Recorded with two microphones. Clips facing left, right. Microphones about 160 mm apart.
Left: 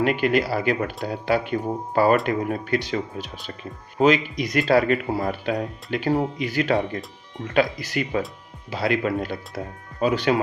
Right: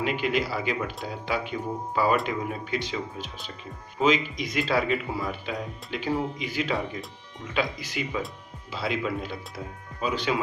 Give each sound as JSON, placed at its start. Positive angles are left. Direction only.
{"t": 0.0, "sound": "speech", "side_deg": 55}